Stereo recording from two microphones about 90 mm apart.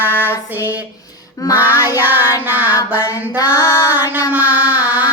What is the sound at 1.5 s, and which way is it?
Child singing, 20° right (ahead or behind).